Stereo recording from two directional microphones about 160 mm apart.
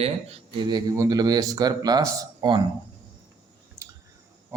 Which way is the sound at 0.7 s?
25° right (ahead or behind).